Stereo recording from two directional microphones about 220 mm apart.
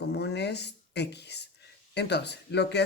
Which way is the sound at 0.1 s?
50° left (ahead or behind).